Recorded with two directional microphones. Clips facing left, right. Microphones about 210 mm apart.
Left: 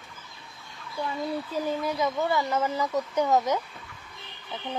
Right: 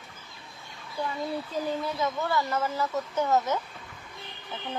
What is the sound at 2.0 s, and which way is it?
Speech, 15° left (ahead or behind).